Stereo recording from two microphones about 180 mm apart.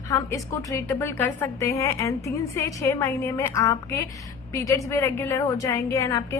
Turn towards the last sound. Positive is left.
turn(degrees=15)  # may be behind; listen again after turning